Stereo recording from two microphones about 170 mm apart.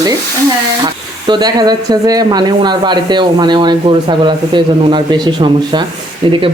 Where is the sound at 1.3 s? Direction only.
25° right (ahead or behind).